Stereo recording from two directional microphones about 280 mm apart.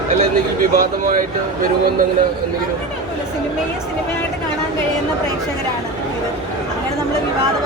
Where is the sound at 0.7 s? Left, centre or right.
Right.